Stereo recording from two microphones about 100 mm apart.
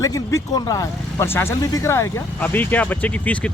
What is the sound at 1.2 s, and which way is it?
Speech, 25° left (ahead or behind).